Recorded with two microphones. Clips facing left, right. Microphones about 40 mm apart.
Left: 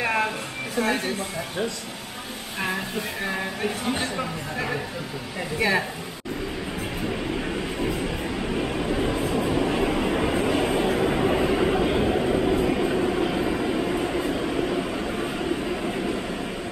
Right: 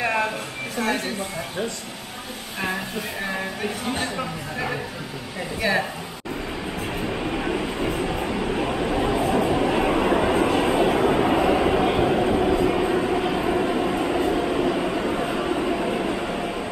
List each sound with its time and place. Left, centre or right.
0.0 s a sound: centre
0.7 s speech: centre
3.3 s speech: centre
7.1 s train: centre
10.5 s vehicle: centre
11.5 s train: centre
12.5 s vehicle: centre
13.7 s train: centre